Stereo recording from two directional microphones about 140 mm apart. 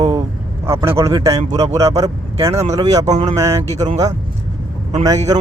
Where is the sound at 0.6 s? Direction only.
20° right (ahead or behind).